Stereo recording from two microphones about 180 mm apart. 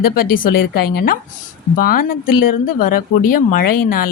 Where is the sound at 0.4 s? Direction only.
55° left (ahead or behind).